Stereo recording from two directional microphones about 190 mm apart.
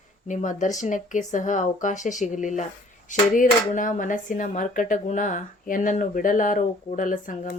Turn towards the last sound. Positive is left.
turn(degrees=45)  # may be behind; listen again after turning